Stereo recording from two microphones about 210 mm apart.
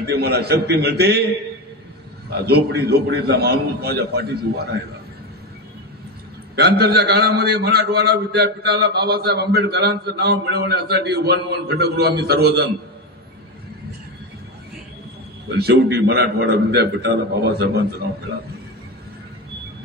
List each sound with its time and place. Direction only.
0.0 s a man's voice: 50° right (ahead or behind)
6.5 s a man's voice: 50° right (ahead or behind)
15.5 s a man's voice: 50° right (ahead or behind)